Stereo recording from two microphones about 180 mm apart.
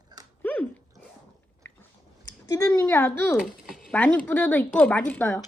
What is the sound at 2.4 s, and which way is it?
Speech, 20° left (ahead or behind).